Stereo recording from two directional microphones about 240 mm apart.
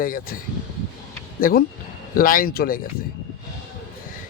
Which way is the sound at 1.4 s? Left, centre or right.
Left.